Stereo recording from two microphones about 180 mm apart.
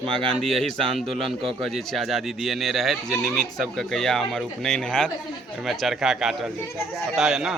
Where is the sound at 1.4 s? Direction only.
30° right (ahead or behind).